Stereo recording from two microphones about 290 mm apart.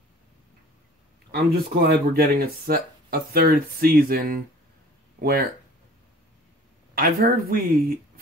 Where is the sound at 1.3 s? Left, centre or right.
Right.